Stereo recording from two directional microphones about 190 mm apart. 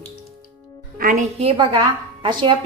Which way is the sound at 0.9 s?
45° right (ahead or behind).